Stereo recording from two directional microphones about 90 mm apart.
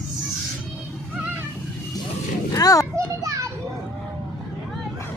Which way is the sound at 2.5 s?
40° left (ahead or behind).